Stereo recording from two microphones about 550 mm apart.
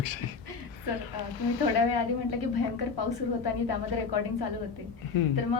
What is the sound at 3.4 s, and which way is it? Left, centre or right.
Speech, left.